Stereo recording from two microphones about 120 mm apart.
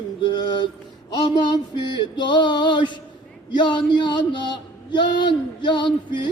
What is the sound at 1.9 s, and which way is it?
A man's voice, 40° left (ahead or behind).